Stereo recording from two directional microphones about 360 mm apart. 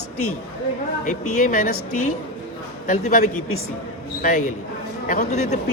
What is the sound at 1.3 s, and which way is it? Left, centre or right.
Speech, left.